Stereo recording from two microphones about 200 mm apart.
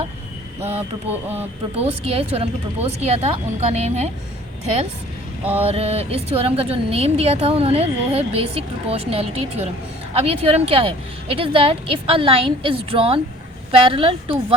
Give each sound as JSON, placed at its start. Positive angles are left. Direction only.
{"t": 0.8, "sound": "a sound", "side_deg": -10}
{"t": 1.7, "sound": "speech", "side_deg": -30}
{"t": 5.6, "sound": "a woman's voice", "side_deg": -30}